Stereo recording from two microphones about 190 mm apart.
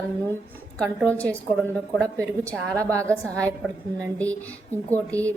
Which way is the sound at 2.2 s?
15° right (ahead or behind).